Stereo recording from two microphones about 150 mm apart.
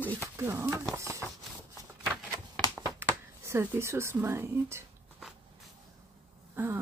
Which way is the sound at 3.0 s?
15° right (ahead or behind).